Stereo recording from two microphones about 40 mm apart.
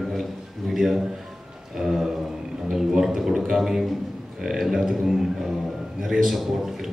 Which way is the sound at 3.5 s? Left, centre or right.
Centre.